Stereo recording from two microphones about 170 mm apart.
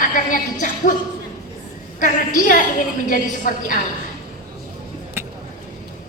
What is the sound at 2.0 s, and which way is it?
A woman's voice, 50° left (ahead or behind).